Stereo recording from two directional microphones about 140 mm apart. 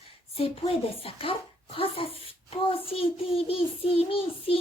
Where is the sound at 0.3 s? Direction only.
40° left (ahead or behind).